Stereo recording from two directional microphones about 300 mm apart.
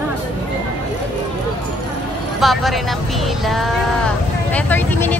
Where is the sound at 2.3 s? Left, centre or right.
Centre.